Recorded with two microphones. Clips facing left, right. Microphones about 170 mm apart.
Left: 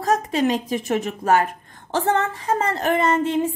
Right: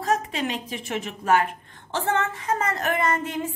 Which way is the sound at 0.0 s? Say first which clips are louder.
Left 5 dB; 40° left (ahead or behind).